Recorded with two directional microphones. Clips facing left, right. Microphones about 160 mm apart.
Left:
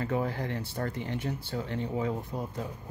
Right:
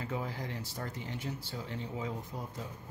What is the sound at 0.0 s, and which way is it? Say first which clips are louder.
Speech: left 7 dB; 60° left (ahead or behind).